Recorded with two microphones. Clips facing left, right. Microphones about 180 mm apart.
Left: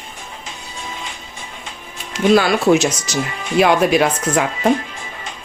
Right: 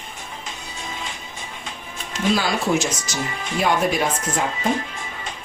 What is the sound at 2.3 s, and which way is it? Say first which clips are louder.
Speech: left 8 dB; 70° left (ahead or behind).